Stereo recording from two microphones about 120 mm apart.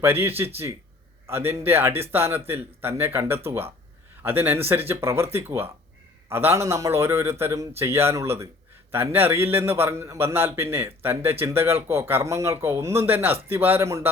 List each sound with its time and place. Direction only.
0.0 s a man's voice: 20° right (ahead or behind)